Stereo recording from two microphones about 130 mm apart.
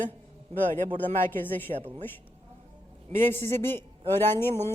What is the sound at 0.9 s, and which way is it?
Speech, 15° left (ahead or behind).